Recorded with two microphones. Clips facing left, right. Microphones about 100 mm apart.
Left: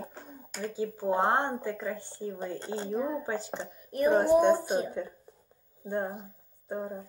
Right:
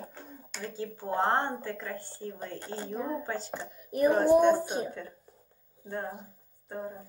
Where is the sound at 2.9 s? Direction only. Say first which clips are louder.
Left 3 dB; 5° left (ahead or behind).